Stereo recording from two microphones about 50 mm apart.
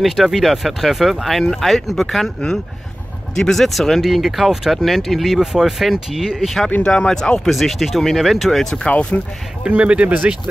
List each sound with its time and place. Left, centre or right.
0.0 s speech: centre
6.8 s speech: centre
7.4 s speech: centre
8.7 s speech: left
9.7 s speech: right